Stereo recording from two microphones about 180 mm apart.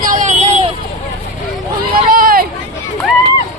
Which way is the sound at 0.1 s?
45° right (ahead or behind).